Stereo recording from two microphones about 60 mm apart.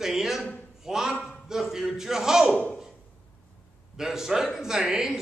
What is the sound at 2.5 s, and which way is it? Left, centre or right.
Speech, left.